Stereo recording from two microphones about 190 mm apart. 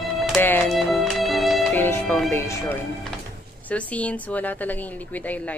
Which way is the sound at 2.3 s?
15° left (ahead or behind).